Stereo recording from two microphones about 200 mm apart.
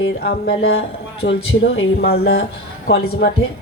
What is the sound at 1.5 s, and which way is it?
Speech, 80° left.